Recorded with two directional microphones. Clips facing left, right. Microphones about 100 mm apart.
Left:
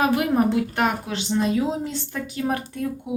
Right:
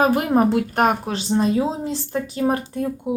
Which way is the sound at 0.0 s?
40° right (ahead or behind).